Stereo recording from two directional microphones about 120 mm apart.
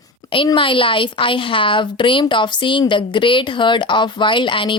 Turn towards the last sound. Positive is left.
turn(degrees=45)  # may be behind; listen again after turning